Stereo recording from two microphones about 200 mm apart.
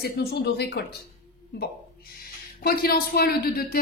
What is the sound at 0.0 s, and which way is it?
Speech, 50° left (ahead or behind).